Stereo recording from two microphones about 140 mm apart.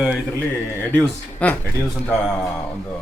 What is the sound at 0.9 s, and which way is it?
Speech, 10° left (ahead or behind).